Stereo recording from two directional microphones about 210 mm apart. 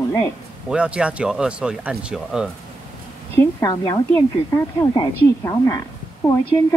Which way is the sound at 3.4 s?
15° left (ahead or behind).